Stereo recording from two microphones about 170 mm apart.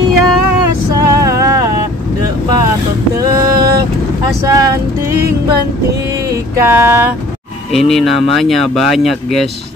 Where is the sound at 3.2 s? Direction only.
20° right (ahead or behind).